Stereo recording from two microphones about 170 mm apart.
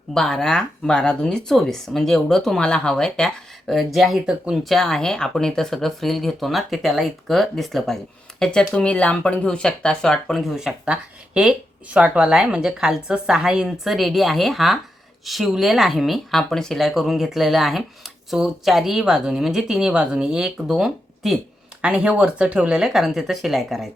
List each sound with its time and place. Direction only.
0.1 s speech: 5° left (ahead or behind)
11.9 s speech: 5° right (ahead or behind)